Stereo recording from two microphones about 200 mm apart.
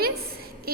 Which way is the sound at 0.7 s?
50° right (ahead or behind).